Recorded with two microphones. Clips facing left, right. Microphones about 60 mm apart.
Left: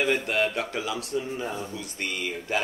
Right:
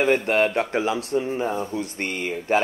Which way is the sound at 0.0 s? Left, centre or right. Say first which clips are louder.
Right 5 dB; right.